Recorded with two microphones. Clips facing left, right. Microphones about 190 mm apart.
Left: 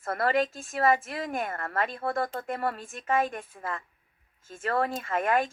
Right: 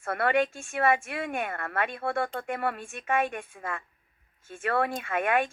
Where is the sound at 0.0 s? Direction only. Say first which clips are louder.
Right 1 dB; 35° left (ahead or behind).